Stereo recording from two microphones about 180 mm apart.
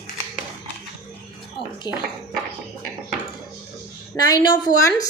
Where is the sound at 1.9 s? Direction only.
25° left (ahead or behind).